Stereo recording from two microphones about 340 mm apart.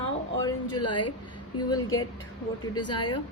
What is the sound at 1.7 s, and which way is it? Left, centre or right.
Speech, centre.